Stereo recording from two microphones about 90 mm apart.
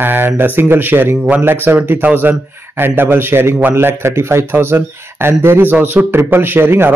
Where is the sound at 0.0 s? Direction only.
25° right (ahead or behind).